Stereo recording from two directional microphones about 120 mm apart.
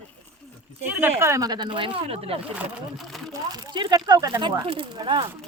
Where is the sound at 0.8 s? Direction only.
20° right (ahead or behind); by 2.4 s 55° right (ahead or behind).